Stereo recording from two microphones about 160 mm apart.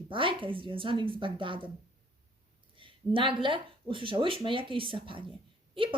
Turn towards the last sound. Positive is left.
turn(degrees=-35)  # may be behind; listen again after turning